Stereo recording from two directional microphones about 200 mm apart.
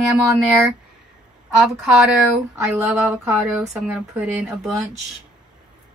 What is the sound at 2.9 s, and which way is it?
Speech, 10° right (ahead or behind).